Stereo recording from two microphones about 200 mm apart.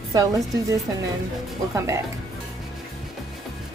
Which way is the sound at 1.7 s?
15° right (ahead or behind).